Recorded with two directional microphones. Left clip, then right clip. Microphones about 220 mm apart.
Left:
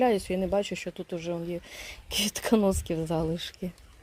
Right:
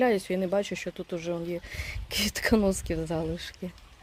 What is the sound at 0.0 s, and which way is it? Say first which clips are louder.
Speech: even; centre (ahead or behind).